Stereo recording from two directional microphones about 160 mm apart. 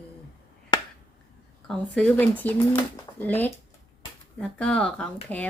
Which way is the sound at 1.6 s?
10° left (ahead or behind).